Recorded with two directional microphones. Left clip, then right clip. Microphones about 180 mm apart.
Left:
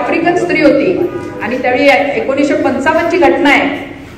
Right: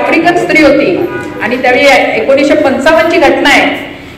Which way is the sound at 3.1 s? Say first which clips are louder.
Right 3 dB; 30° right (ahead or behind).